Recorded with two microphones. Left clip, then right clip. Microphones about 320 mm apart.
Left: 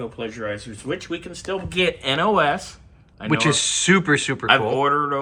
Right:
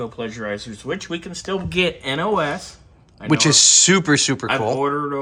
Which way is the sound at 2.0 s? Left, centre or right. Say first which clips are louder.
Left 2 dB; centre.